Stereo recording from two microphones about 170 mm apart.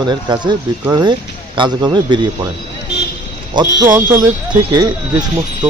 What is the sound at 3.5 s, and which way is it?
Speech, 25° right (ahead or behind).